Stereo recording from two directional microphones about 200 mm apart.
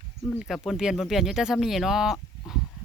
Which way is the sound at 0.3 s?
Centre (ahead or behind).